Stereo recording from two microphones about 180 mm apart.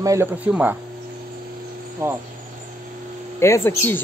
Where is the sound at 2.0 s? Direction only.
15° right (ahead or behind).